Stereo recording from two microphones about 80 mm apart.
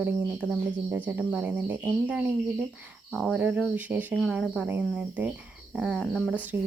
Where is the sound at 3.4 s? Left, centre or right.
Centre.